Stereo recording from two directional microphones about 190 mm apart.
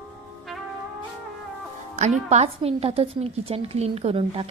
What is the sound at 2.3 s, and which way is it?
A woman's voice, 35° right (ahead or behind).